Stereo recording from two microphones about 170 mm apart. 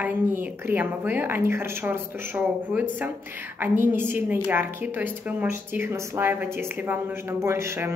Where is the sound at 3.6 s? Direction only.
10° right (ahead or behind).